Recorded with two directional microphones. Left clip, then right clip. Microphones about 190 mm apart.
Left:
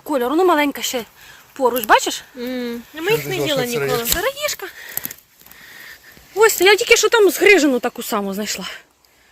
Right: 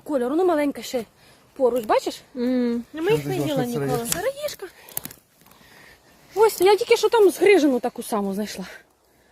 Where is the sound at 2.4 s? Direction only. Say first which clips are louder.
Right 2 dB; 40° right (ahead or behind).